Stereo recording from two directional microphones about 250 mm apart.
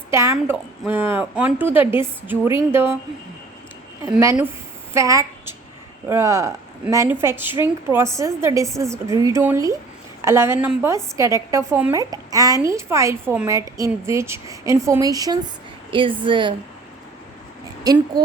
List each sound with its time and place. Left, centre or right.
0.1 s a woman's voice: centre
4.1 s a woman's voice: centre
17.8 s a woman's voice: centre